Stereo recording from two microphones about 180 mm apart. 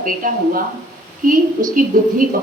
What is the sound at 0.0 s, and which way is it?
Speech, 50° right (ahead or behind).